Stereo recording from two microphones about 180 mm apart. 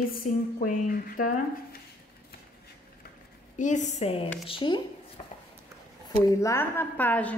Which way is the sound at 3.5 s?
45° left (ahead or behind).